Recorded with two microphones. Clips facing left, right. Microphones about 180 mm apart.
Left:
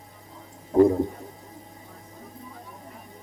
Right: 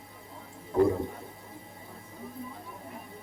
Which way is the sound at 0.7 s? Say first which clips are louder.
Left 6 dB; 35° left (ahead or behind).